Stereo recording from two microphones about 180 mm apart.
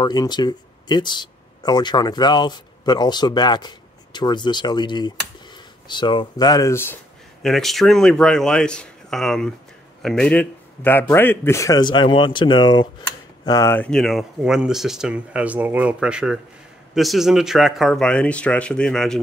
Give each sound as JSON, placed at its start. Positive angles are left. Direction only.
{"t": 0.0, "sound": "speech", "side_deg": 25}
{"t": 7.4, "sound": "a man's voice", "side_deg": 0}